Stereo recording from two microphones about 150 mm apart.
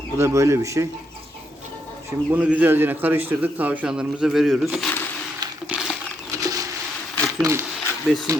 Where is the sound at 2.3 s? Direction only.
10° right (ahead or behind).